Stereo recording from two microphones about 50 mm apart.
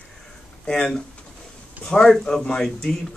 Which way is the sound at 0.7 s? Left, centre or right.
Centre.